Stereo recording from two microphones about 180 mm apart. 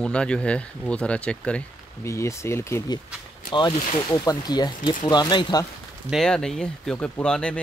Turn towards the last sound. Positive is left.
turn(degrees=5)  # may be behind; listen again after turning